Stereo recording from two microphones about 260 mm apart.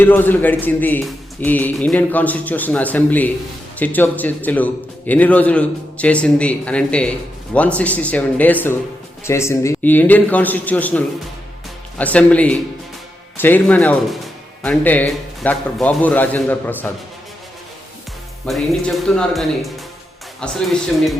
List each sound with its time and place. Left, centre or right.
0.0 s a man's voice: centre
18.4 s a man's voice: centre